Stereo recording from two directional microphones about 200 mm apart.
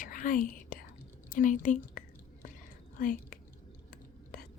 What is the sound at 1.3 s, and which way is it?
Whispering, 40° left (ahead or behind).